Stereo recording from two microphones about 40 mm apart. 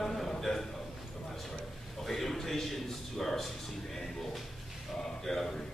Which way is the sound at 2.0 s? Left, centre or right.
Centre.